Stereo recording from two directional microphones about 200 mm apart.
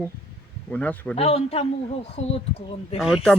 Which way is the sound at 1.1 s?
30° left (ahead or behind).